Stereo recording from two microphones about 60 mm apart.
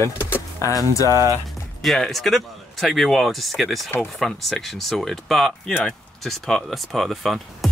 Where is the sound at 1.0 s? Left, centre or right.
Left.